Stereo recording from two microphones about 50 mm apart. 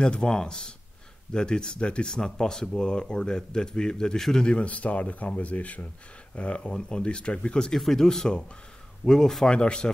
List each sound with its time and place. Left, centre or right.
0.0 s speech: centre
4.5 s speech: left